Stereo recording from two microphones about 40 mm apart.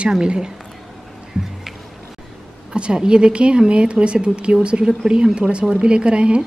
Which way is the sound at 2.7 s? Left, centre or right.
Right.